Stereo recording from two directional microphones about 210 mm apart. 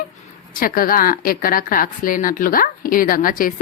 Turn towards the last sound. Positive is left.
turn(degrees=40)  # may be behind; listen again after turning